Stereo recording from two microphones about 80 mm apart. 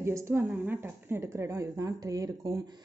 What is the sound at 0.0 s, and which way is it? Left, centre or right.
A woman's voice, right.